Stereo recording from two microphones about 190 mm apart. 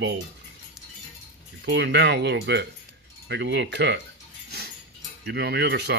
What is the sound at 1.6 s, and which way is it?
Speech, 65° right (ahead or behind).